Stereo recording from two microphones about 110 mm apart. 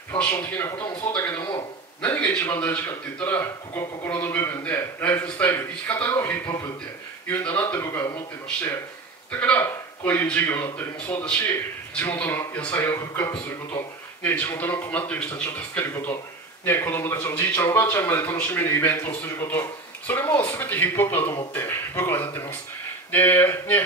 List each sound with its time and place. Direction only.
0.2 s a man's voice: 15° left (ahead or behind)
2.0 s a man's voice: 15° left (ahead or behind)
7.2 s a man's voice: 15° left (ahead or behind)
9.3 s a man's voice: 15° left (ahead or behind)
12.9 s a man's voice: 25° left (ahead or behind)